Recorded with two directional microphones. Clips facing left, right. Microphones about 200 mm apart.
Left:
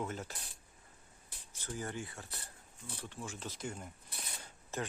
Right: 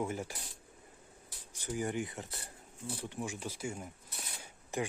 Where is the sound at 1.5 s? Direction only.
15° right (ahead or behind).